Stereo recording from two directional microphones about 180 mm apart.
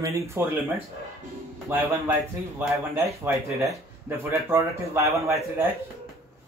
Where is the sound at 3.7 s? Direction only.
15° right (ahead or behind).